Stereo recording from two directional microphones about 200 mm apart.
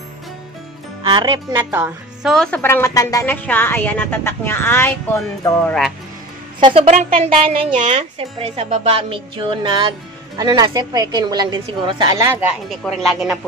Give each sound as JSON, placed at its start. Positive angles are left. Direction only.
{"t": 1.0, "sound": "speech", "side_deg": -20}
{"t": 1.5, "sound": "speech", "side_deg": -10}
{"t": 2.3, "sound": "speech", "side_deg": 5}
{"t": 6.6, "sound": "speech", "side_deg": -30}